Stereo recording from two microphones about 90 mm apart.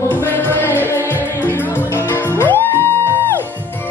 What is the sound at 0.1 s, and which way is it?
Music, 25° left (ahead or behind).